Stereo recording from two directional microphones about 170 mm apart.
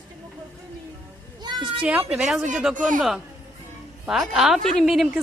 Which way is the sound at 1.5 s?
25° right (ahead or behind).